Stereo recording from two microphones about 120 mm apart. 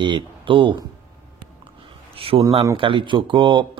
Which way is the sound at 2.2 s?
50° right (ahead or behind).